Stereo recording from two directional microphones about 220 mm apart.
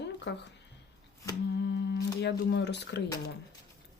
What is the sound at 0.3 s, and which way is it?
Speech, 55° left (ahead or behind).